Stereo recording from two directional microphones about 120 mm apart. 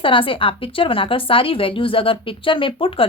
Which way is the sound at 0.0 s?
45° left (ahead or behind).